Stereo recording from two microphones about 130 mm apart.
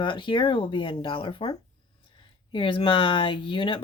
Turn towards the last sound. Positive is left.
turn(degrees=40)  # may be behind; listen again after turning